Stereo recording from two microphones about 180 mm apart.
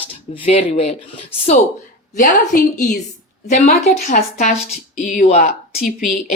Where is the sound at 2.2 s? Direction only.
45° left (ahead or behind).